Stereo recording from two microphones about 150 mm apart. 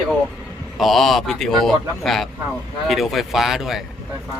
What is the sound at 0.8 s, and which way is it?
Speech, centre (ahead or behind).